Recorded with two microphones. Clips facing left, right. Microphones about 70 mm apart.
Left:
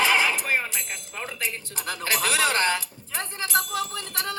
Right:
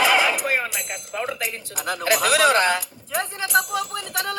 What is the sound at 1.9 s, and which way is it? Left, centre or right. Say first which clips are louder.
Speech: right 6 dB; right.